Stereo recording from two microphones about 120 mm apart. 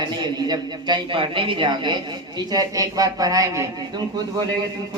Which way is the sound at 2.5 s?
30° right (ahead or behind).